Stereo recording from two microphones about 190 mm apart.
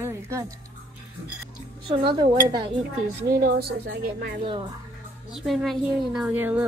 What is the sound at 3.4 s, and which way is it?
Speech, 55° right (ahead or behind).